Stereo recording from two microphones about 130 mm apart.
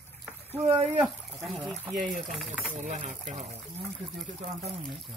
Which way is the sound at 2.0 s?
80° right.